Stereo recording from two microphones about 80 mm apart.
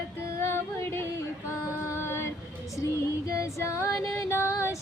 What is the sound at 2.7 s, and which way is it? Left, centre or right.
Female singing, left.